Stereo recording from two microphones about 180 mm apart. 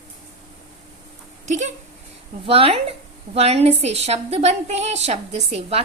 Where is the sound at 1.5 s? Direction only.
45° right (ahead or behind).